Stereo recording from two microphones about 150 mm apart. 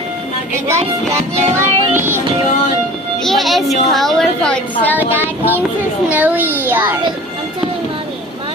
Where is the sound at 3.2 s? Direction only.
Centre (ahead or behind).